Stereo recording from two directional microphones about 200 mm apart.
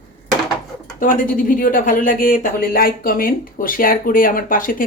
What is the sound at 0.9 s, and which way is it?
Speech, 40° left (ahead or behind).